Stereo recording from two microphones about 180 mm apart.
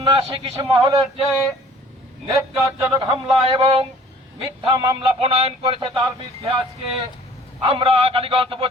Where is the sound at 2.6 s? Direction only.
20° right (ahead or behind).